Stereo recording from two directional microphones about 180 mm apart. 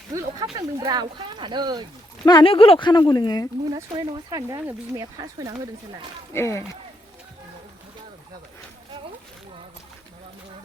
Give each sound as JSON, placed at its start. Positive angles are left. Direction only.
{"t": 0.1, "sound": "a sound", "side_deg": -15}
{"t": 0.5, "sound": "speech", "side_deg": -20}
{"t": 2.2, "sound": "speech", "side_deg": 25}
{"t": 3.7, "sound": "speech", "side_deg": -20}
{"t": 6.3, "sound": "speech", "side_deg": 15}